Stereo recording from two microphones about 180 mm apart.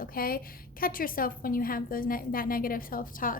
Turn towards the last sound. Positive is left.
turn(degrees=50)  # may be behind; listen again after turning